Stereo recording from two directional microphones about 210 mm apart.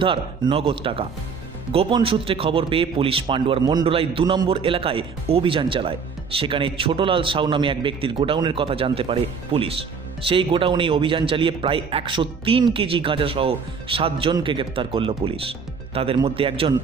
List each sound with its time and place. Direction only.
0.0 s a man's voice: 25° right (ahead or behind)